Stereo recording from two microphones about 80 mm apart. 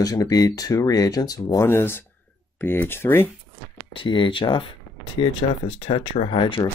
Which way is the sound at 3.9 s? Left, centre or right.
Left.